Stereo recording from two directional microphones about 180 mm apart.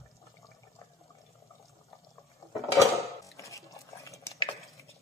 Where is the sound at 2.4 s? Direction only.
15° left (ahead or behind).